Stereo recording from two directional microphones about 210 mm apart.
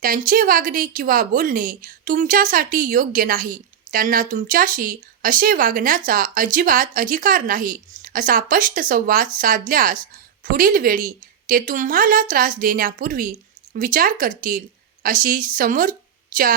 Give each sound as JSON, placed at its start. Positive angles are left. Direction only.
{"t": 0.3, "sound": "a woman's voice", "side_deg": -40}